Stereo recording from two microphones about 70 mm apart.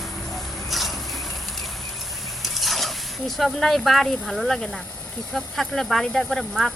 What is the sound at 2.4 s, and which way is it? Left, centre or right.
Speech, centre.